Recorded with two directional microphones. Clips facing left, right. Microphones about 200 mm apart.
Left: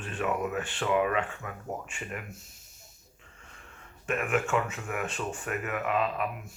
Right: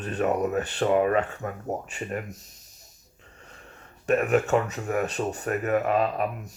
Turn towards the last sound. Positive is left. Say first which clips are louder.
# right 4 dB
turn(degrees=-40)  # may be behind; listen again after turning